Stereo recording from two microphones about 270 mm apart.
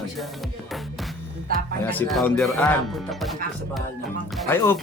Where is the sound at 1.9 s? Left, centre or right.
Centre.